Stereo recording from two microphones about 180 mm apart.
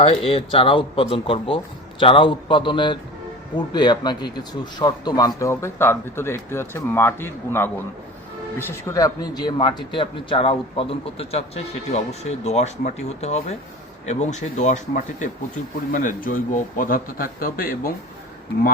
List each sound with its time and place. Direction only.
0.0 s a man's voice: 35° left (ahead or behind); by 17.9 s 55° left (ahead or behind)